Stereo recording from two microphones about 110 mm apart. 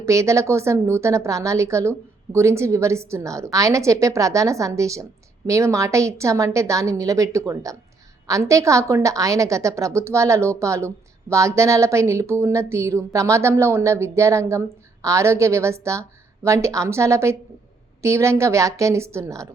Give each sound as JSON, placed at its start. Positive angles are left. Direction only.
{"t": 0.0, "sound": "a woman's voice", "side_deg": -25}